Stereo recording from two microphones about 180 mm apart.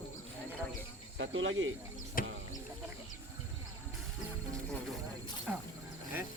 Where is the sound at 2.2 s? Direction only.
50° left (ahead or behind).